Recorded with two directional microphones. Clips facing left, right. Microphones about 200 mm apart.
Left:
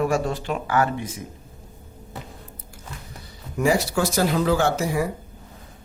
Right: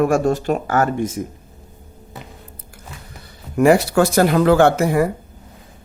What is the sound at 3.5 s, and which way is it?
Speech, 60° right (ahead or behind).